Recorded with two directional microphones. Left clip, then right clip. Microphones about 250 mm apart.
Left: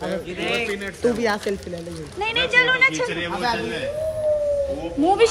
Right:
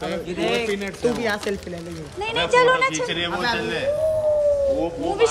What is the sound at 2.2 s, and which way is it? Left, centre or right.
Speech, centre.